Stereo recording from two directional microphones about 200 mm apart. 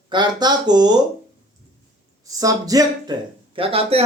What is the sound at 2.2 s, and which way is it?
Speech, 15° right (ahead or behind).